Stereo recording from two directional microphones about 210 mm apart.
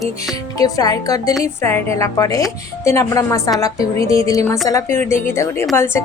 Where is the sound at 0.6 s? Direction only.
15° left (ahead or behind).